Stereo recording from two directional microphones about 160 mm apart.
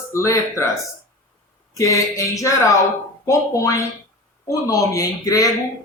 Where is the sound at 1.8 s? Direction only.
20° left (ahead or behind).